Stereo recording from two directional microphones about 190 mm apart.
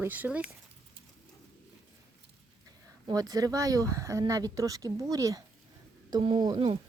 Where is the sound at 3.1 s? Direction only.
20° right (ahead or behind).